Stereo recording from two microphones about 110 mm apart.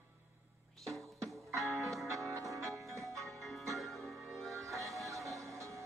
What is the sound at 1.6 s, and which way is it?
Music, centre (ahead or behind).